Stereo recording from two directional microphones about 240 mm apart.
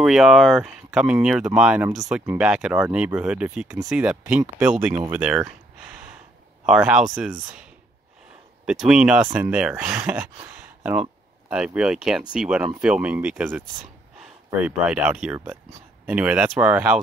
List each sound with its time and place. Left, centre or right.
0.0 s speech: centre
6.6 s speech: centre
8.6 s speech: centre